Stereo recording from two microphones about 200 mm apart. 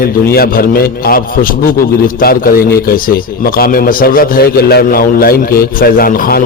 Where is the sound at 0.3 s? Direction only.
50° left (ahead or behind).